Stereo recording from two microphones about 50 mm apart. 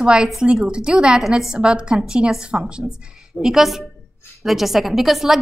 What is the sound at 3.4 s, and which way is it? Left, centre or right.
A woman's voice, centre.